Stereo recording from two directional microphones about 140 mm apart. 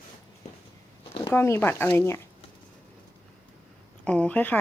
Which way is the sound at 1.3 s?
15° left (ahead or behind).